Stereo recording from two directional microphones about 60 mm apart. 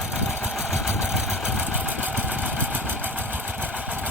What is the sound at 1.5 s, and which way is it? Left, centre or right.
Vehicle, right.